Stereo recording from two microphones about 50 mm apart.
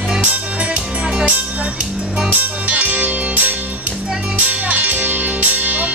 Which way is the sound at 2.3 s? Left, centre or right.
Right.